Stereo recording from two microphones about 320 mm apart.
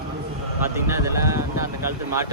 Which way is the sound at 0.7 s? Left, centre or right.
Centre.